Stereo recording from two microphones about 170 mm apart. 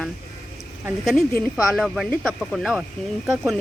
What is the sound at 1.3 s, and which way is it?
Speech, 15° left (ahead or behind).